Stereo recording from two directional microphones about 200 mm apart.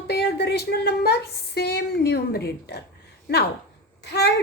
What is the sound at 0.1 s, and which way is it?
A woman's voice, 55° left (ahead or behind).